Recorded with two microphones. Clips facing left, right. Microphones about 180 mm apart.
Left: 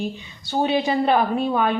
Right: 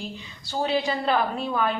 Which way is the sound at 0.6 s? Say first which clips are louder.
Left 3 dB; 20° left (ahead or behind).